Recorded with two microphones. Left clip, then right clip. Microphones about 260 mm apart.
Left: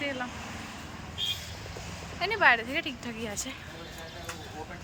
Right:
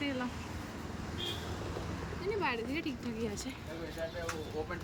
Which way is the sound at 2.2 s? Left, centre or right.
Centre.